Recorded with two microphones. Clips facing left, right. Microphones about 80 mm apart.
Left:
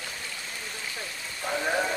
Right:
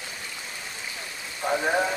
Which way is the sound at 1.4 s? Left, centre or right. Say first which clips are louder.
Right 4 dB; centre.